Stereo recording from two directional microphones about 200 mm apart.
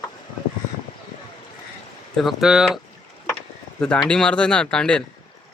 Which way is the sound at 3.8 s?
5° left (ahead or behind).